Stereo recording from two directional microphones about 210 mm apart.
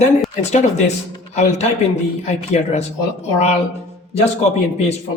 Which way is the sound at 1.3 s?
35° left (ahead or behind).